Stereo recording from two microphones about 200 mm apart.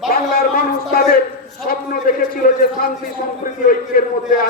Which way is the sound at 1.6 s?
45° left (ahead or behind).